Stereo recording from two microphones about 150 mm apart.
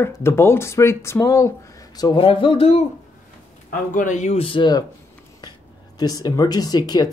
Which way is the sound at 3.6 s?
60° left (ahead or behind).